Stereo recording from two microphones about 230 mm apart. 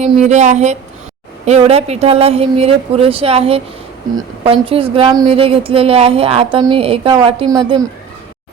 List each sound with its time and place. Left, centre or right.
0.0 s a woman's voice: right